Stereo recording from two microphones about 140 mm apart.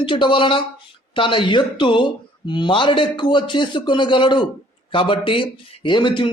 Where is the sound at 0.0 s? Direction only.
35° left (ahead or behind).